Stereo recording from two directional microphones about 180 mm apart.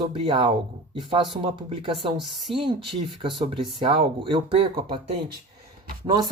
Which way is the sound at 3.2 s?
30° right (ahead or behind).